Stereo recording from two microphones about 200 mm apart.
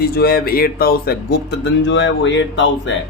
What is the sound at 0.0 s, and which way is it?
A man's voice, 50° left (ahead or behind).